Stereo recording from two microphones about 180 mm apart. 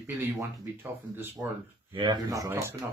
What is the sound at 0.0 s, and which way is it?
Speech, 10° right (ahead or behind).